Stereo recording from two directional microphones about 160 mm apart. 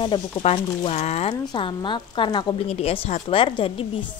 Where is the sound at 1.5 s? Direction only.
30° left (ahead or behind).